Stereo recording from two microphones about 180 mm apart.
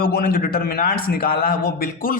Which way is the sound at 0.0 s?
55° left (ahead or behind).